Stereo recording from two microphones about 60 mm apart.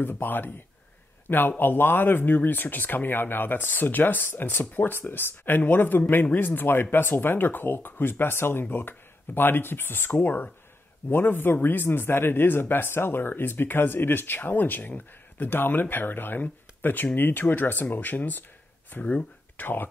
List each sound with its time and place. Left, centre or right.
0.0 s speech: left
1.6 s speech: left